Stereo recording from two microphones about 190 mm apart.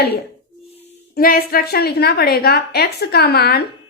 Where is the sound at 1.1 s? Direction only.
50° left (ahead or behind).